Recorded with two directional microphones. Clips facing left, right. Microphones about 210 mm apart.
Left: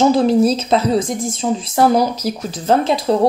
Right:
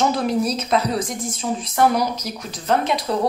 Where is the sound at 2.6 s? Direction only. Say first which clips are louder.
Left 5 dB; 30° left (ahead or behind).